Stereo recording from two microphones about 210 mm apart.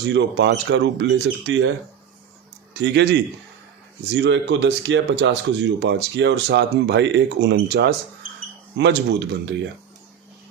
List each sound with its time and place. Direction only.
0.0 s speech: 55° right (ahead or behind)
2.7 s a man's voice: 55° right (ahead or behind)